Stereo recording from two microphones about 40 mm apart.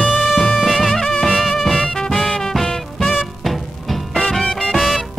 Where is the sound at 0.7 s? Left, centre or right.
Centre.